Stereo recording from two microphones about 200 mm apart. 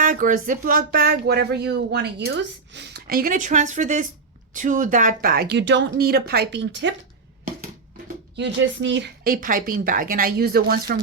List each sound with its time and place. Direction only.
0.0 s speech: 40° right (ahead or behind); by 6.9 s 60° right (ahead or behind)
7.4 s speech: 45° right (ahead or behind)